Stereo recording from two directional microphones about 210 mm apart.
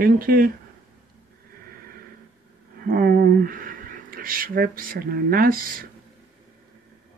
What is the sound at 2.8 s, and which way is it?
Speech, 45° right (ahead or behind).